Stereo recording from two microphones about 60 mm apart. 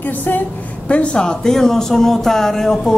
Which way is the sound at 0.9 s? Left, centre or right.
Centre.